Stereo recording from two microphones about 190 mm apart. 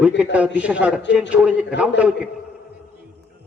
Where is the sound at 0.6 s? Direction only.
5° right (ahead or behind).